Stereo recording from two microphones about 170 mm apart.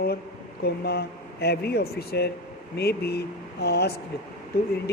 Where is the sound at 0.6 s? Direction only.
70° left (ahead or behind).